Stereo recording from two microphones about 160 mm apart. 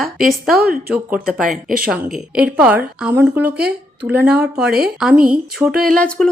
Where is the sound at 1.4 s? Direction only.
60° right (ahead or behind).